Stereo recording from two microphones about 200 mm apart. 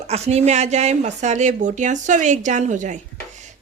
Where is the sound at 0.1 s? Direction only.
30° right (ahead or behind).